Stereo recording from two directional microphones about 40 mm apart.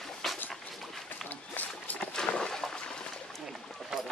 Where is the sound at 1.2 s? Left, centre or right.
Left.